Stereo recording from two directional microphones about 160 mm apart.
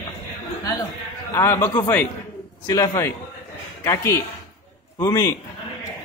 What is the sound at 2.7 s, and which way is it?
A man's voice, 20° left (ahead or behind).